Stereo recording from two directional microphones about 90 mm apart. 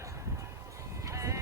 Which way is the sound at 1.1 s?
35° right (ahead or behind).